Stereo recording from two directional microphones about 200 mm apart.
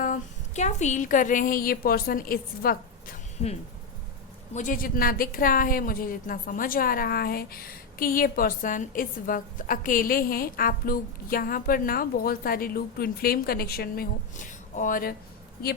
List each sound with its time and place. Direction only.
0.0 s a woman's voice: 40° left (ahead or behind)
4.5 s a woman's voice: 40° left (ahead or behind)